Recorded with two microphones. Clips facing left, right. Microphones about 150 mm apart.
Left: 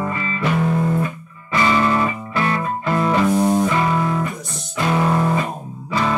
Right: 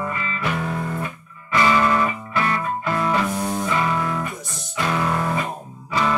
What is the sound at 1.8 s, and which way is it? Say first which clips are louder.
Music: left 1 dB; 25° left (ahead or behind).